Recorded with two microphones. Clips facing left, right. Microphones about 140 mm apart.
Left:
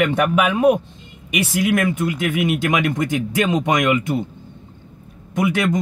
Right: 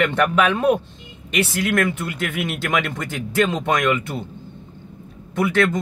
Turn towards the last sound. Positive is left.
turn(degrees=15)  # may be behind; listen again after turning